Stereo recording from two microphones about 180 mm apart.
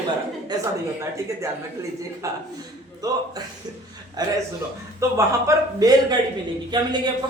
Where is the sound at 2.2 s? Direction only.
20° right (ahead or behind).